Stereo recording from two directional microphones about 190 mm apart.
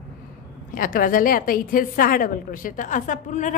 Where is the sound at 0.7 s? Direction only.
45° left (ahead or behind).